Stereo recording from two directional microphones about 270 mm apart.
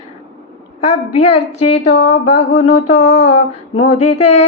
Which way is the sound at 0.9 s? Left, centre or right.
Left.